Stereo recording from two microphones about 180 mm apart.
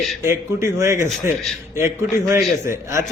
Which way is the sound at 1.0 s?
Centre (ahead or behind).